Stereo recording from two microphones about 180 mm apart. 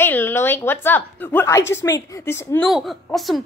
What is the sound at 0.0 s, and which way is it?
A woman's voice, 10° left (ahead or behind).